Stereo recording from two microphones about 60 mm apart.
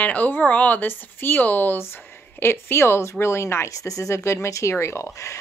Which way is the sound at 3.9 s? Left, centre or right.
Left.